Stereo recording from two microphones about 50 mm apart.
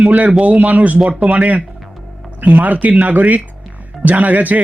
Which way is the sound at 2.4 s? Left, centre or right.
Right.